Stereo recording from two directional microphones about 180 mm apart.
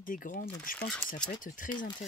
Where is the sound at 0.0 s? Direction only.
50° left (ahead or behind).